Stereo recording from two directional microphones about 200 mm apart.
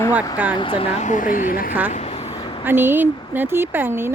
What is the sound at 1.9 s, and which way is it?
Vehicle, 35° left (ahead or behind).